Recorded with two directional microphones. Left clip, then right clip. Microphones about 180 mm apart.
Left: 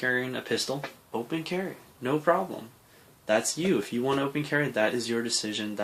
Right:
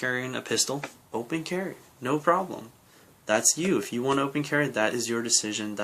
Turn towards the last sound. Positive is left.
turn(degrees=-20)  # may be behind; listen again after turning